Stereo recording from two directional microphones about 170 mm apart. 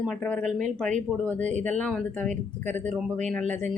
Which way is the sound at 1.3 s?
45° right (ahead or behind).